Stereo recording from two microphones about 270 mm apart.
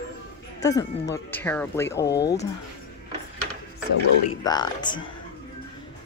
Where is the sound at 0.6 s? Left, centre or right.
Centre.